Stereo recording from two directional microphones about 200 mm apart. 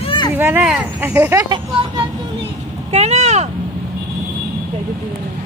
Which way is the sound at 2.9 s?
35° right (ahead or behind).